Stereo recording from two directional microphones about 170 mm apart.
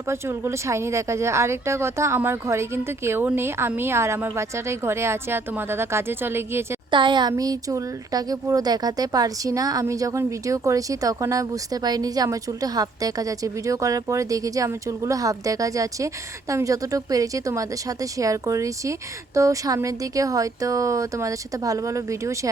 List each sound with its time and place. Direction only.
0.1 s speech: 15° right (ahead or behind)
6.9 s speech: 25° right (ahead or behind)